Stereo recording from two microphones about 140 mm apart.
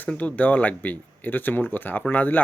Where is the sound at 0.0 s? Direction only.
10° left (ahead or behind).